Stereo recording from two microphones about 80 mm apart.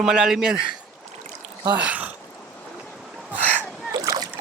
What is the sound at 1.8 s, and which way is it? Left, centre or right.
Speech, centre.